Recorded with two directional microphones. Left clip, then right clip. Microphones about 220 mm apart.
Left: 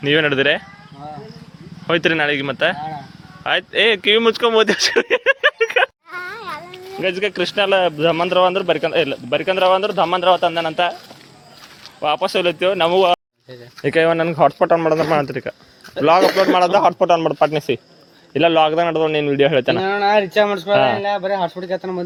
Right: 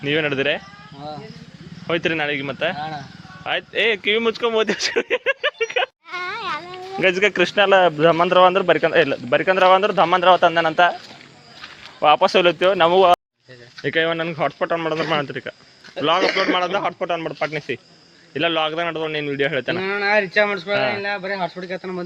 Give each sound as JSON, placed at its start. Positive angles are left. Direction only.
{"t": 0.0, "sound": "speech", "side_deg": 10}
{"t": 1.9, "sound": "speech", "side_deg": 10}
{"t": 6.1, "sound": "insect", "side_deg": -45}
{"t": 6.9, "sound": "speech", "side_deg": -20}
{"t": 11.9, "sound": "speech", "side_deg": -20}
{"t": 13.8, "sound": "a man's voice", "side_deg": 20}